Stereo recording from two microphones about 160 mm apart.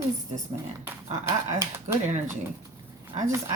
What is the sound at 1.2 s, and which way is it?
Speech, 15° right (ahead or behind).